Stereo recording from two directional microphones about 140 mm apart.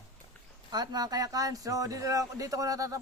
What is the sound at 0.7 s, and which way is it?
A man's voice, 30° right (ahead or behind).